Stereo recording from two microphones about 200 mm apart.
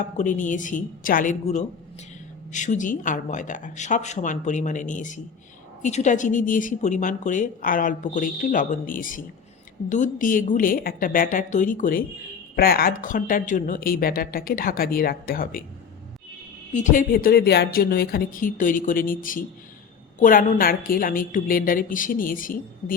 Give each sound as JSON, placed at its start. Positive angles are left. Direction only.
{"t": 0.2, "sound": "a woman's voice", "side_deg": 40}
{"t": 16.7, "sound": "speech", "side_deg": 40}